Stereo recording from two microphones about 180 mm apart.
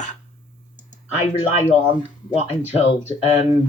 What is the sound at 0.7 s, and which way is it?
Computer keyboard, 40° left (ahead or behind).